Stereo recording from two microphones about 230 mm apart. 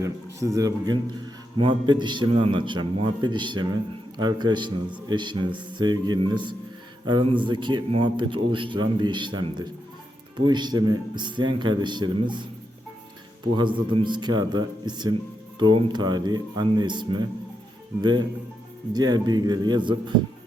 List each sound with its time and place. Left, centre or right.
0.0 s a man's voice: centre
13.6 s a man's voice: right
18.9 s speech: centre